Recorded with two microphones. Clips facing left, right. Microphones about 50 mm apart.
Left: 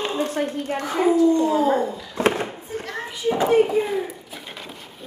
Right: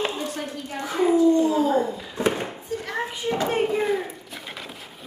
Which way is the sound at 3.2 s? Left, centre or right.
Left.